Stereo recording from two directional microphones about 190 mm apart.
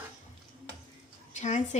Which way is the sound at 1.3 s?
40° left (ahead or behind).